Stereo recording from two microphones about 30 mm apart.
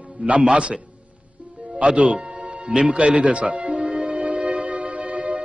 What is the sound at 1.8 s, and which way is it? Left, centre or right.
Music, right.